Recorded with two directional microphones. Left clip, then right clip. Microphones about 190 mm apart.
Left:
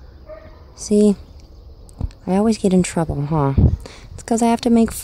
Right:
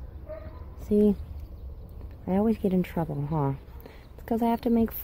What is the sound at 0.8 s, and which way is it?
Speech, 45° left (ahead or behind).